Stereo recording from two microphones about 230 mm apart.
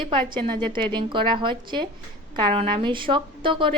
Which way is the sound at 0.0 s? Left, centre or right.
Right.